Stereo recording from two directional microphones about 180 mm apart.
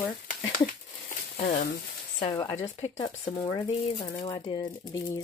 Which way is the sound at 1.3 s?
45° left (ahead or behind).